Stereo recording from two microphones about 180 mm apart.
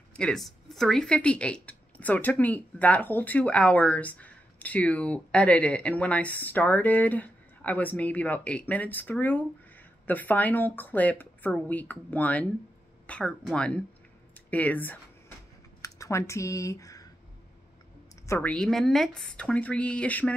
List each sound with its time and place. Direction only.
0.1 s speech: 5° left (ahead or behind)
15.8 s typing: 15° left (ahead or behind)
18.2 s a sound: 15° left (ahead or behind)
18.5 s speech: centre (ahead or behind)